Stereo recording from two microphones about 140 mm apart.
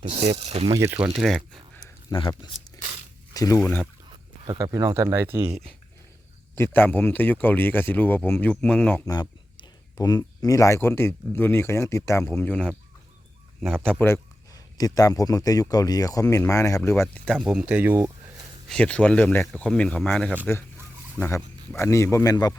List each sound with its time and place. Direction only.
0.0 s speech: 40° right (ahead or behind)
0.8 s speech: 15° right (ahead or behind)
2.0 s speech: 35° left (ahead or behind)
4.4 s speech: 25° right (ahead or behind)
5.5 s speech: centre (ahead or behind)
6.6 s speech: 15° left (ahead or behind)
9.6 s speech: 30° left (ahead or behind); by 12.7 s 10° left (ahead or behind)
14.0 s speech: 20° left (ahead or behind)
17.2 s speech: centre (ahead or behind)
18.7 s speech: 10° left (ahead or behind)
21.2 s speech: 15° left (ahead or behind)